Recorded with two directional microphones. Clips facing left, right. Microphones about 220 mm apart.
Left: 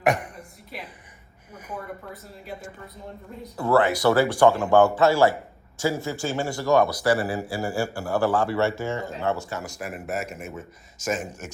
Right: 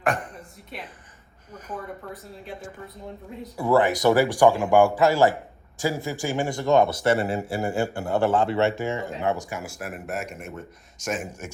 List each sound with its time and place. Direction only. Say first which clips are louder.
0.0 s a woman's voice: left 3 dB; 10° left (ahead or behind)
2.4 s speech: left 2 dB; centre (ahead or behind)
3.6 s a man's voice: even; 15° right (ahead or behind); by 11.3 s centre (ahead or behind)